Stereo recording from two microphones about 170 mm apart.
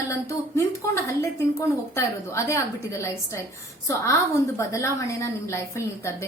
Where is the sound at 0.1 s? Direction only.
15° left (ahead or behind).